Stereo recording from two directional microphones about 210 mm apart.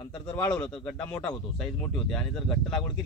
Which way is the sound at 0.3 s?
5° left (ahead or behind).